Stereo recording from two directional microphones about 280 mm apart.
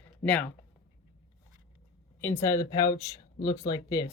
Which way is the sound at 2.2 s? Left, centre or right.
Centre.